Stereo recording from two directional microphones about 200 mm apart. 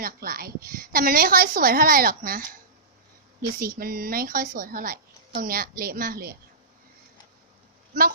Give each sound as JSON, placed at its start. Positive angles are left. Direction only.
{"t": 0.0, "sound": "a woman's voice", "side_deg": -45}
{"t": 3.6, "sound": "a woman's voice", "side_deg": -45}